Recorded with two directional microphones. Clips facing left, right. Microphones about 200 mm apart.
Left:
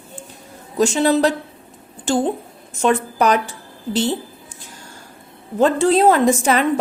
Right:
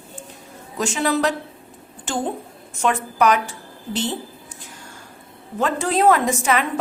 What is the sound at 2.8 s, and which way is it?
Speech, 35° left (ahead or behind).